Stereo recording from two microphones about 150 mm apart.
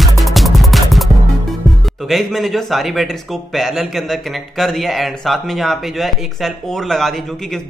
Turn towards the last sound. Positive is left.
turn(degrees=0)  # may be behind; listen again after turning